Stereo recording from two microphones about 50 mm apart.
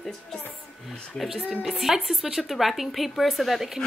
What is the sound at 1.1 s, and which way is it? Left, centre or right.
A woman's voice, centre.